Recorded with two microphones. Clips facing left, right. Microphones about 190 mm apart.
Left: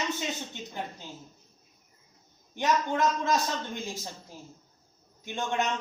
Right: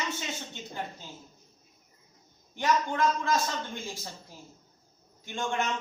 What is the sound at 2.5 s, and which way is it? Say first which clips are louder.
Speech: left 1 dB; 20° left (ahead or behind).